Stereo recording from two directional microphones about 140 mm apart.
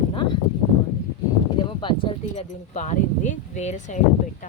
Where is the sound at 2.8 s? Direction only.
60° left (ahead or behind).